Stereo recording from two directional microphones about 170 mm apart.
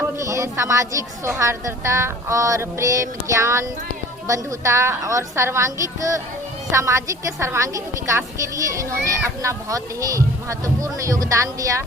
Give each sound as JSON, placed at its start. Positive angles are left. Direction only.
{"t": 0.0, "sound": "a woman's voice", "side_deg": -15}